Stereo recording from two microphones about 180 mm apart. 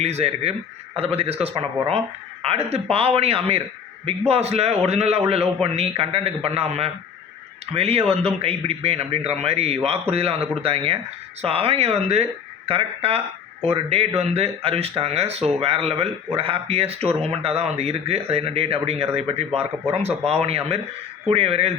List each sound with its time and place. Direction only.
0.0 s speech: 35° right (ahead or behind)